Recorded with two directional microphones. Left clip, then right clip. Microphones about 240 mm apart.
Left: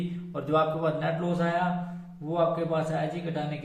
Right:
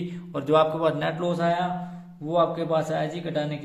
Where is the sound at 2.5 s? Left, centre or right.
Right.